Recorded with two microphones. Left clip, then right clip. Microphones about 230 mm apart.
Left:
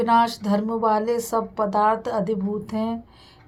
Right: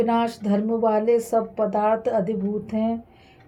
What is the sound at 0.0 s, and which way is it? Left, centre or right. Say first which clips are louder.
Speech: left 4 dB; left.